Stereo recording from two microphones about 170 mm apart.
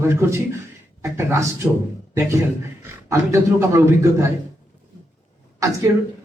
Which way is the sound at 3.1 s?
20° right (ahead or behind).